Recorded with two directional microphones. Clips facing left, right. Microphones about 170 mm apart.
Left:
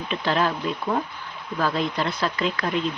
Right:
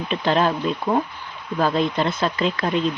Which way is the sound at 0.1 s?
25° right (ahead or behind).